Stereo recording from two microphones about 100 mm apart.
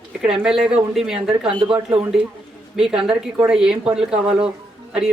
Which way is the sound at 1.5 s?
55° right (ahead or behind).